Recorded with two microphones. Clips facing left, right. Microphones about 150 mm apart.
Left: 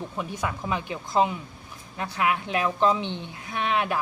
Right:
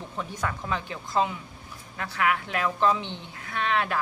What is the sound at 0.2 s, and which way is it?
A woman's voice, 15° left (ahead or behind).